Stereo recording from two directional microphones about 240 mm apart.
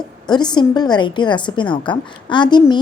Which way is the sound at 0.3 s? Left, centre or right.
Centre.